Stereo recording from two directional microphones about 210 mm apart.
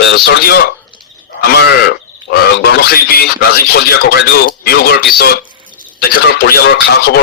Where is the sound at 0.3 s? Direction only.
45° left (ahead or behind).